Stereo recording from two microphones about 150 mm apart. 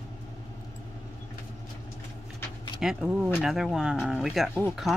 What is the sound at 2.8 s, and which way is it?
Speech, 5° right (ahead or behind).